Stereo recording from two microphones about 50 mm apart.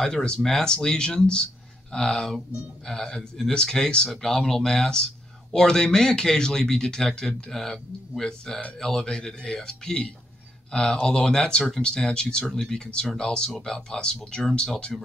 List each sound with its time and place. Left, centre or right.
0.2 s speech: centre